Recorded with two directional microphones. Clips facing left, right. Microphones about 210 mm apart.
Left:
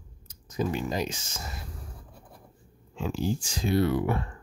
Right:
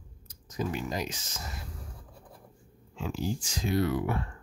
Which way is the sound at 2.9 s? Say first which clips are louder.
Left 4 dB; 30° left (ahead or behind).